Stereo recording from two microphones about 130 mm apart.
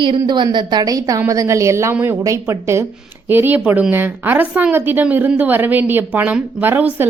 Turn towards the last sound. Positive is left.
turn(degrees=-15)  # may be behind; listen again after turning